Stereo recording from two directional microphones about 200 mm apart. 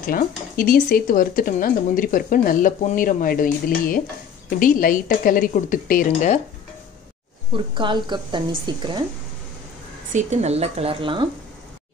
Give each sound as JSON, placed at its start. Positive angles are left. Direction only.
{"t": 0.1, "sound": "speech", "side_deg": 45}
{"t": 7.5, "sound": "a woman's voice", "side_deg": -25}
{"t": 10.1, "sound": "speech", "side_deg": -35}